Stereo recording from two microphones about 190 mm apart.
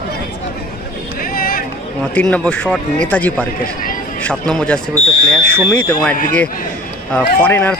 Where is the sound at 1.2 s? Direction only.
50° left (ahead or behind).